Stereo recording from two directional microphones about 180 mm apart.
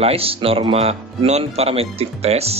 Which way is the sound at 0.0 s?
30° right (ahead or behind).